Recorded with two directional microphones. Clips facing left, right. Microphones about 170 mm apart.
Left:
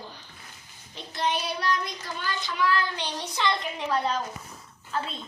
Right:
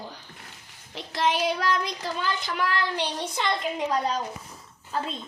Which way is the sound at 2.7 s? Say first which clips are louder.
Right 2 dB; 65° right (ahead or behind).